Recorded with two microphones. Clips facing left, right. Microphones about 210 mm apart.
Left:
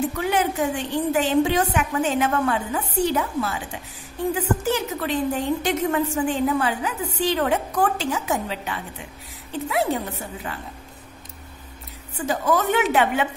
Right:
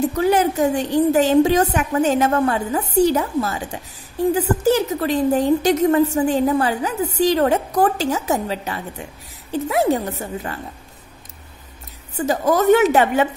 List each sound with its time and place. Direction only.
0.1 s a woman's voice: 40° right (ahead or behind)
12.2 s a woman's voice: 40° right (ahead or behind)